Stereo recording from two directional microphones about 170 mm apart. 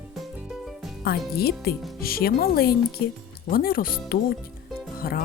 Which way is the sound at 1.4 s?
65° left (ahead or behind).